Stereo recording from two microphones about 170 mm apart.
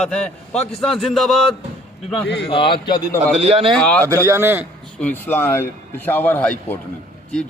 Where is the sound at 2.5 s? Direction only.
30° left (ahead or behind).